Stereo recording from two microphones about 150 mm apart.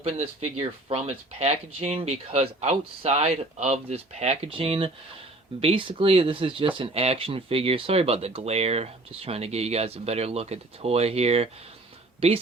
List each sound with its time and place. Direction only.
0.0 s speech: 45° right (ahead or behind)